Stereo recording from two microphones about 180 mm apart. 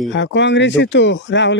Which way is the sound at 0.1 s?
85° left.